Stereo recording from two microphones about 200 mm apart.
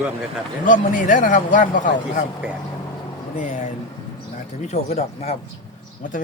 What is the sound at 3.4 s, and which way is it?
Speech, 40° left (ahead or behind).